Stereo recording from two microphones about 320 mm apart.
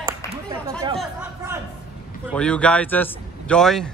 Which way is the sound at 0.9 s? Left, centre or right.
Centre.